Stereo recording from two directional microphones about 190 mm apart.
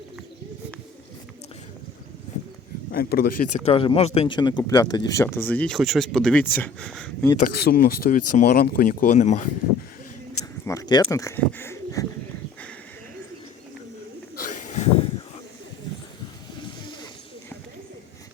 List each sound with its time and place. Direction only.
2.9 s speech: 55° left (ahead or behind)
3.7 s speech: 30° left (ahead or behind); by 7.3 s 5° left (ahead or behind)
7.3 s speech: 50° left (ahead or behind)
10.7 s speech: 20° left (ahead or behind)
14.4 s a sound: 40° left (ahead or behind)